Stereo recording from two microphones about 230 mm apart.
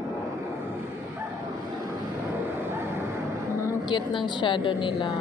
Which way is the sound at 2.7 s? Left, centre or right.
Centre.